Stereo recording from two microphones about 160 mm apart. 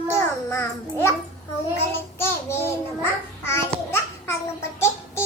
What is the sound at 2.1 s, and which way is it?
Babbling, 15° left (ahead or behind).